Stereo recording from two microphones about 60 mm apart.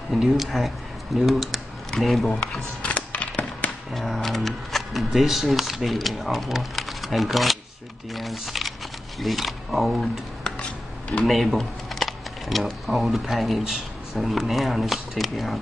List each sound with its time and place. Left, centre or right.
0.1 s speech: centre
2.8 s a sound: left
3.9 s speech: centre
11.2 s speech: centre